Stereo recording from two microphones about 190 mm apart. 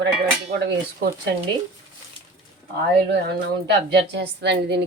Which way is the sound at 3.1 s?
60° right (ahead or behind).